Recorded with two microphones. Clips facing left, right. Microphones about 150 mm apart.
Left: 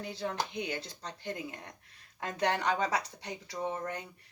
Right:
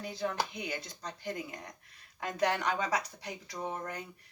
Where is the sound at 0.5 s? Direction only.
30° left (ahead or behind).